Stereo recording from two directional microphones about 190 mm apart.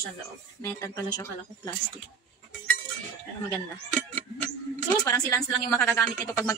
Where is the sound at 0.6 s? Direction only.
15° left (ahead or behind).